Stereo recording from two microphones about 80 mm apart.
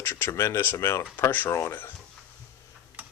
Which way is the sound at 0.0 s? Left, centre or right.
Left.